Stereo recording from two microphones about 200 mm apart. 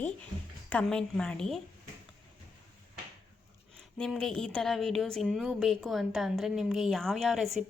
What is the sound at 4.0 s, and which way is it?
A woman's voice, 5° left (ahead or behind).